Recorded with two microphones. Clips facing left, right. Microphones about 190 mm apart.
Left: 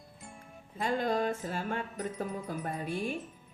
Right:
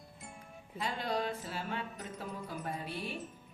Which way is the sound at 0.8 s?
50° left (ahead or behind).